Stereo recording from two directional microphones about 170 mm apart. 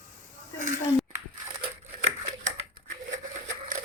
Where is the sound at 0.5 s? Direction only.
45° right (ahead or behind).